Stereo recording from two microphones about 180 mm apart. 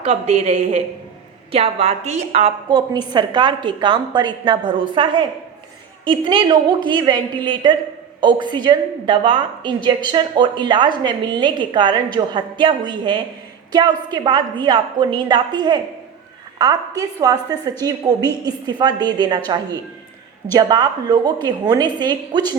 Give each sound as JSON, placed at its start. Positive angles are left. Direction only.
{"t": 0.0, "sound": "a woman's voice", "side_deg": -35}
{"t": 2.6, "sound": "a woman's voice", "side_deg": -25}